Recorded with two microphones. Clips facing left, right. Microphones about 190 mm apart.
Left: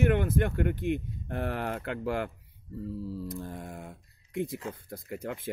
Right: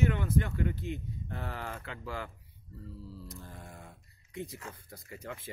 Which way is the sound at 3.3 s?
55° left (ahead or behind).